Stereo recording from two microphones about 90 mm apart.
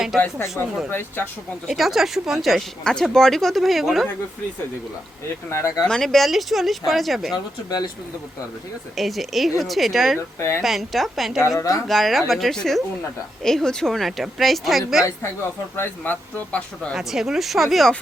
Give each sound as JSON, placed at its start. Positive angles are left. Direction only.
{"t": 0.3, "sound": "speech", "side_deg": 35}
{"t": 1.6, "sound": "speech", "side_deg": 0}
{"t": 5.5, "sound": "speech", "side_deg": 30}
{"t": 5.9, "sound": "speech", "side_deg": 5}
{"t": 9.0, "sound": "speech", "side_deg": 0}
{"t": 11.4, "sound": "speech", "side_deg": 40}
{"t": 11.9, "sound": "speech", "side_deg": 0}
{"t": 15.7, "sound": "speech", "side_deg": 25}
{"t": 16.9, "sound": "speech", "side_deg": -5}